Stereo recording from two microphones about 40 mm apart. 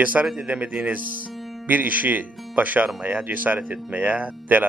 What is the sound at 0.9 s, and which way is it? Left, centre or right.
Speech, right.